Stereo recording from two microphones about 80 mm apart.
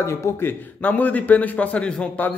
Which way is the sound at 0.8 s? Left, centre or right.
Centre.